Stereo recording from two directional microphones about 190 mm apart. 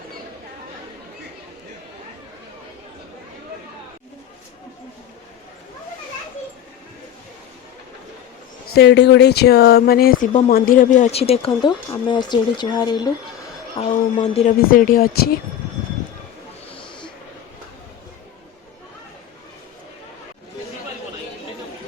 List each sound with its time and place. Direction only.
8.7 s a woman's voice: 60° left (ahead or behind); by 13.9 s 30° left (ahead or behind)
14.2 s speech: 40° left (ahead or behind)